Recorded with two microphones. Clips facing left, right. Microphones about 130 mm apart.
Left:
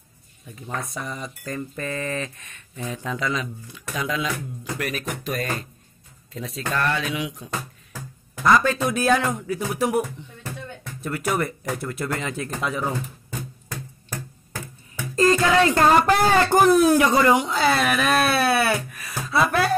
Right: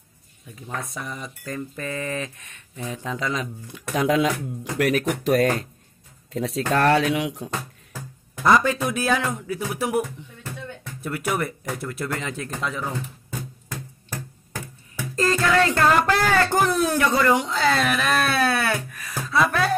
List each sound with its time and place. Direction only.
0.6 s speech: centre (ahead or behind); by 3.4 s 30° right (ahead or behind)
3.9 s speech: 65° right (ahead or behind)
8.5 s speech: 20° right (ahead or behind)
8.8 s speech: 5° right (ahead or behind); by 12.8 s 15° left (ahead or behind)
15.1 s speech: 20° left (ahead or behind)